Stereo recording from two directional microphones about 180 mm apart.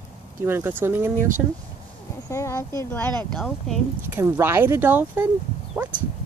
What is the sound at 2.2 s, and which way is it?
Speech, 15° left (ahead or behind).